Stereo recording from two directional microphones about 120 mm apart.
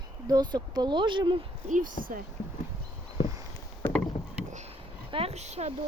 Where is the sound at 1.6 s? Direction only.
90° right.